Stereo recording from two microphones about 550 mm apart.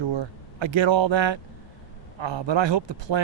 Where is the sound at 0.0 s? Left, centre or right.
Right.